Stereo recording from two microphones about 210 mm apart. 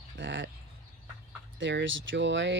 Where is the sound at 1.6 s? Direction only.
60° right (ahead or behind).